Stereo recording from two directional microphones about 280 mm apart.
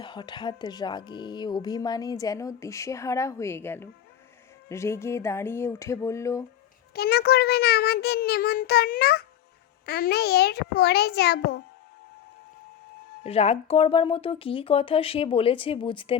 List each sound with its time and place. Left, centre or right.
0.0 s speech: centre
6.9 s a child's voice: left
13.2 s speech: left